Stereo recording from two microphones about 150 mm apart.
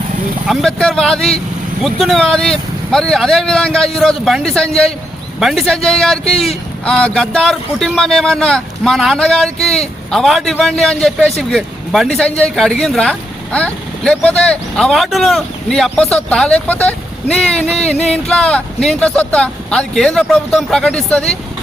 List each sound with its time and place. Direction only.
0.4 s speech: centre (ahead or behind)